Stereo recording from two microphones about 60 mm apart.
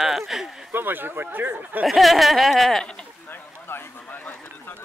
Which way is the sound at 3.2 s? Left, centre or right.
Left.